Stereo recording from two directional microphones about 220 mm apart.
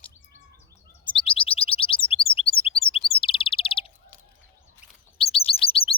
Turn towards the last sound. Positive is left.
turn(degrees=25)  # may be behind; listen again after turning